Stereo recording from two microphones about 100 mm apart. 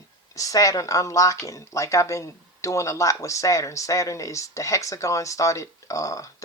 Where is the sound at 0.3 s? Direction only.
35° left (ahead or behind).